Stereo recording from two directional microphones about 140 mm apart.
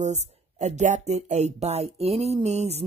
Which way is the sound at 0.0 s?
55° right (ahead or behind).